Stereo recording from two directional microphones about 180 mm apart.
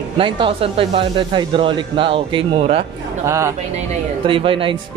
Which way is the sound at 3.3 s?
15° right (ahead or behind).